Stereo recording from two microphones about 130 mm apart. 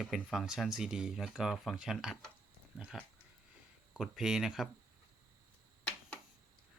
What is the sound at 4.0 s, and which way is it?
Speech, 5° right (ahead or behind).